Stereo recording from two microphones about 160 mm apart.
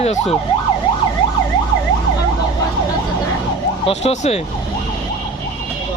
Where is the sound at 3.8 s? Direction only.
45° left (ahead or behind).